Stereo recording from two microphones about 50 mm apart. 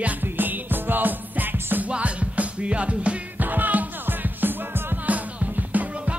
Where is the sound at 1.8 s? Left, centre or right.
Right.